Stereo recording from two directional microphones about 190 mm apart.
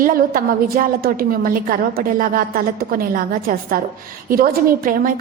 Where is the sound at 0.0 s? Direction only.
45° right (ahead or behind).